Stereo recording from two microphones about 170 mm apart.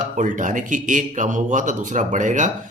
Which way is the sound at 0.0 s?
50° right (ahead or behind).